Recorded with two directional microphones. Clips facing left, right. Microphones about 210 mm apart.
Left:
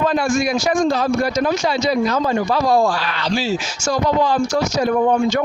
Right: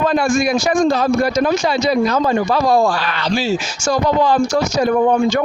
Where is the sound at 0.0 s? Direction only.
60° right (ahead or behind).